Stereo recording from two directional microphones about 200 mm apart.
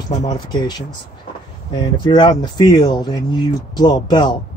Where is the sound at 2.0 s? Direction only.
20° left (ahead or behind).